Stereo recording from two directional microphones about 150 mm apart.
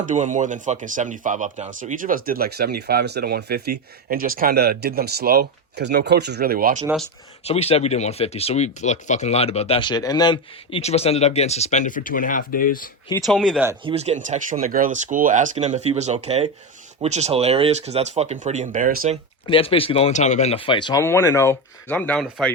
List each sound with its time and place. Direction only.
0.0 s speech: 55° right (ahead or behind); by 3.6 s 90° right
4.1 s speech: 70° right (ahead or behind)
7.4 s speech: 40° left (ahead or behind); by 12.9 s 70° left (ahead or behind)
13.2 s speech: centre (ahead or behind)
13.8 s speech: 45° right (ahead or behind); by 19.1 s 60° right (ahead or behind)
19.5 s speech: 35° left (ahead or behind)
21.0 s speech: 20° left (ahead or behind); by 22.5 s centre (ahead or behind)